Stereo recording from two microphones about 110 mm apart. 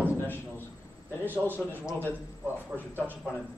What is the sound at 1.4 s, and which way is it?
Speech, 15° left (ahead or behind).